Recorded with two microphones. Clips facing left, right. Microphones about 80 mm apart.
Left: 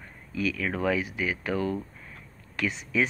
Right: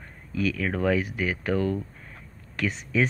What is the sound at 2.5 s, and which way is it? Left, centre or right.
Speech, right.